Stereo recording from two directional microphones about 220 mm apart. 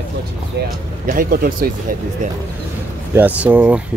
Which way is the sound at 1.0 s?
40° right (ahead or behind).